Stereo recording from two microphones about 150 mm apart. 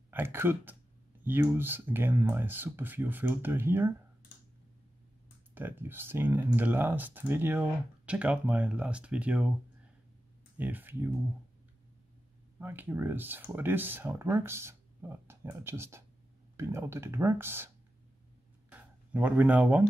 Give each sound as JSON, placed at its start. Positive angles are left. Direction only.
{"t": 0.1, "sound": "speech", "side_deg": -15}
{"t": 5.5, "sound": "speech", "side_deg": -15}
{"t": 10.6, "sound": "speech", "side_deg": -10}
{"t": 12.5, "sound": "speech", "side_deg": -15}
{"t": 18.7, "sound": "a sound", "side_deg": -10}